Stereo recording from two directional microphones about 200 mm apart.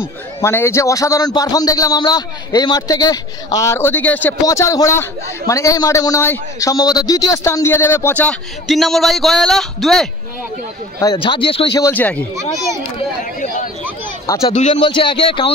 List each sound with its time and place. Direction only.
0.4 s a man's voice: 10° left (ahead or behind)
11.0 s speech: 20° left (ahead or behind)
11.8 s a man's voice: 10° left (ahead or behind)
13.2 s a sound: 40° left (ahead or behind)
14.4 s a man's voice: 35° left (ahead or behind)
14.7 s speech: 25° left (ahead or behind)